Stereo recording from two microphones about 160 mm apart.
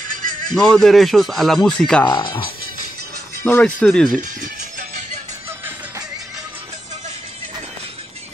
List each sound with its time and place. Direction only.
0.1 s a sound: 60° right (ahead or behind)
0.6 s speech: 5° left (ahead or behind)
2.1 s speech: 30° left (ahead or behind)
3.4 s speech: 10° left (ahead or behind)
4.2 s music: 55° right (ahead or behind)